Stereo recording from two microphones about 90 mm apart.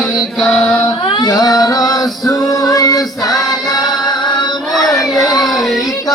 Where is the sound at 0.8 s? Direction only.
60° left (ahead or behind); by 3.1 s 45° left (ahead or behind).